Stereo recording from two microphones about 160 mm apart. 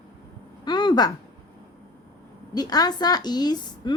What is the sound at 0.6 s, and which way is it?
Speech, 25° left (ahead or behind).